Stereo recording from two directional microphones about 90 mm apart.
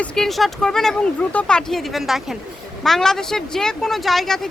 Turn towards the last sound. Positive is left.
turn(degrees=5)  # may be behind; listen again after turning